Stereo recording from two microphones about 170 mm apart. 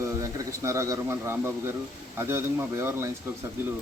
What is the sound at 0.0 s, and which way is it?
A man's voice, 20° right (ahead or behind).